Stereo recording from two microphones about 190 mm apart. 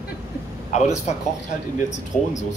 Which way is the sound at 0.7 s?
35° left (ahead or behind).